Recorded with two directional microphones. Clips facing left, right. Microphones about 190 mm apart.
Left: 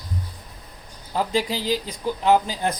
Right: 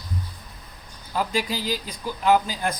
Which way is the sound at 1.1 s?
25° left (ahead or behind).